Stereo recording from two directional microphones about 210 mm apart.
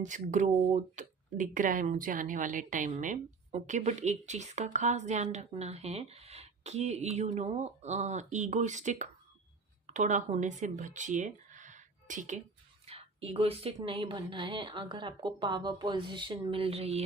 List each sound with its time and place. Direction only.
0.0 s a woman's voice: 35° right (ahead or behind)